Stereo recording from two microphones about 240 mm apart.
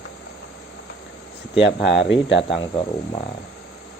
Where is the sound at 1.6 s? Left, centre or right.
Left.